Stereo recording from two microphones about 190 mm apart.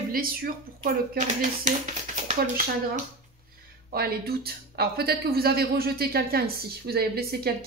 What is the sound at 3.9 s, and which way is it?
Speech, 55° right (ahead or behind).